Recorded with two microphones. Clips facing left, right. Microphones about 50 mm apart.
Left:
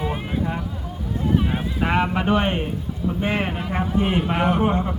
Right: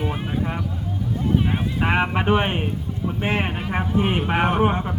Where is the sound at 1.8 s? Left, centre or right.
Right.